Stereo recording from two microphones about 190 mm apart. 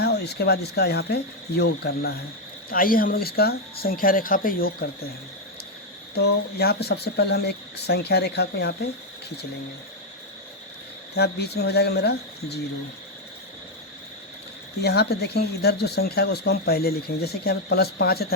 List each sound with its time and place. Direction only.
0.0 s speech: 60° left (ahead or behind)
6.1 s speech: 55° left (ahead or behind)
11.1 s speech: 60° left (ahead or behind)
14.8 s speech: 60° left (ahead or behind)